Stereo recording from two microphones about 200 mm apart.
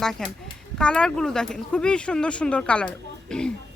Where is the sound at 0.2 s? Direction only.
5° left (ahead or behind).